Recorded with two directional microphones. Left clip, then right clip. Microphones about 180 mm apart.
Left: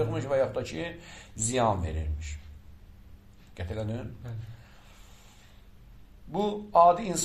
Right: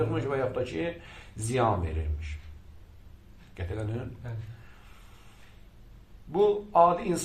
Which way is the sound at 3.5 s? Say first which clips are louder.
Left 1 dB; 45° left (ahead or behind).